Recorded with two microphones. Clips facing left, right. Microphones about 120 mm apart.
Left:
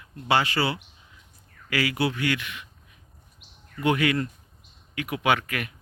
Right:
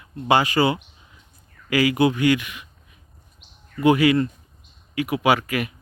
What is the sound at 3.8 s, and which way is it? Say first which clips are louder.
Speech: right 7 dB; 10° right (ahead or behind).